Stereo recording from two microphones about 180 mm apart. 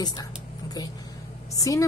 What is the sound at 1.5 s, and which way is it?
Speech, 20° left (ahead or behind).